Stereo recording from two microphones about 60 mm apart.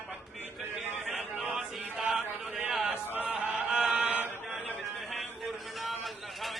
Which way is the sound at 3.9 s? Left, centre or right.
Right.